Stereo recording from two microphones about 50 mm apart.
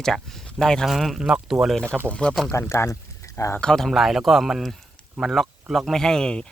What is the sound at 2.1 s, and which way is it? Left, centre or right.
Speech, left.